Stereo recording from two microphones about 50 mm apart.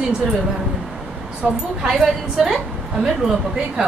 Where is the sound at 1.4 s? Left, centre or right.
Centre.